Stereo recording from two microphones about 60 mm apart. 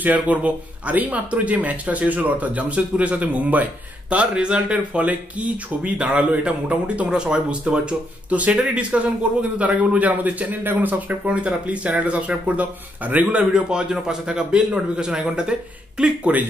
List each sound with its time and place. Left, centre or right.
0.0 s speech: right
11.2 s speech: centre
16.0 s speech: right